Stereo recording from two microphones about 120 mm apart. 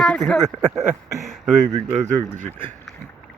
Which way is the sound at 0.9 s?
5° right (ahead or behind).